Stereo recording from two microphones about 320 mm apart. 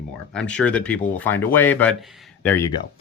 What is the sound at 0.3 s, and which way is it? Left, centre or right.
Speech, centre.